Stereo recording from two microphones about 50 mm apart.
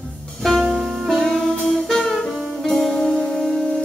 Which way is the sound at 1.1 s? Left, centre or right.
Centre.